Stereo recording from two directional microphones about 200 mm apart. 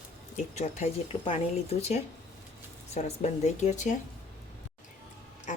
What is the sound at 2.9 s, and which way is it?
Speech, 35° left (ahead or behind).